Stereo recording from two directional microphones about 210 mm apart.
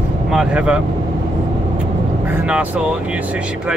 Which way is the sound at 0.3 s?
5° right (ahead or behind).